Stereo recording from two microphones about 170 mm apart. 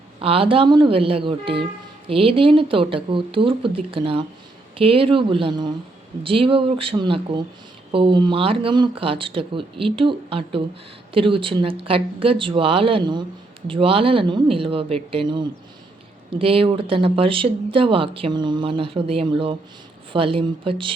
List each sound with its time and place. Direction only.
0.2 s speech: 35° right (ahead or behind)